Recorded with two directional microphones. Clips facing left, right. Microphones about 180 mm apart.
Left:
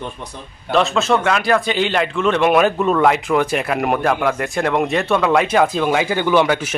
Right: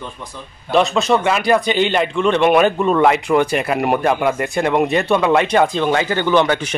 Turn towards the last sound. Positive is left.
turn(degrees=5)  # may be behind; listen again after turning